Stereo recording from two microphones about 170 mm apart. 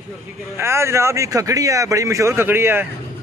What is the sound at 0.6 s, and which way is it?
Speech, 15° right (ahead or behind).